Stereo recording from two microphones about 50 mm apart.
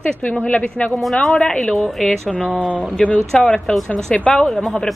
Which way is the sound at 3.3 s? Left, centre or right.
Centre.